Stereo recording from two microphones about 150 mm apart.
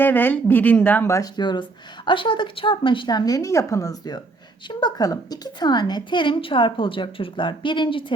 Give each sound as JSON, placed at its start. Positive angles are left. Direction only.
{"t": 0.0, "sound": "a woman's voice", "side_deg": 15}